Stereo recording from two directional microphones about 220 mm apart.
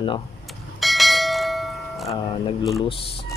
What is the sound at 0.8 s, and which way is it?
Church bell, centre (ahead or behind).